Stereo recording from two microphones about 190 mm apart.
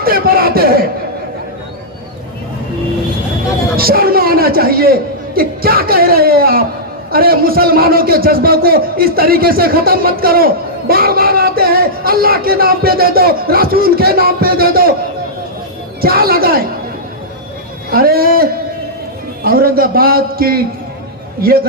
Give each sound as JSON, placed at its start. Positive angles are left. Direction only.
{"t": 0.0, "sound": "speech", "side_deg": -50}
{"t": 3.8, "sound": "a man's voice", "side_deg": -50}
{"t": 16.0, "sound": "a man's voice", "side_deg": -50}
{"t": 17.9, "sound": "a man's voice", "side_deg": -50}
{"t": 19.5, "sound": "a man's voice", "side_deg": -50}